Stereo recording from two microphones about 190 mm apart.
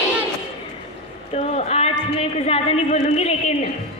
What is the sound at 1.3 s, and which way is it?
A woman's voice, 35° left (ahead or behind).